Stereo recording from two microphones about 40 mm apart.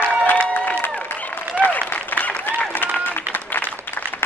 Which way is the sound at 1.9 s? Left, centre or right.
Left.